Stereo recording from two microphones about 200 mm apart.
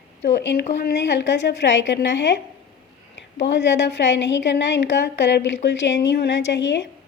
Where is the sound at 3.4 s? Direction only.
60° left (ahead or behind).